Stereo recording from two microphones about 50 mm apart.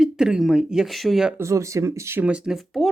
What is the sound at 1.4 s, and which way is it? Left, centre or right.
Speech, right.